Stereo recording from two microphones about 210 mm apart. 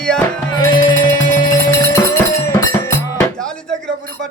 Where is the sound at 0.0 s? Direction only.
5° left (ahead or behind).